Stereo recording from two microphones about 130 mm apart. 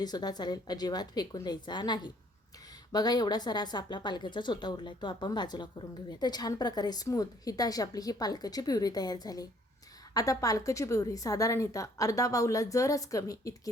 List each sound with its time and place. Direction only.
0.0 s a woman's voice: 30° left (ahead or behind)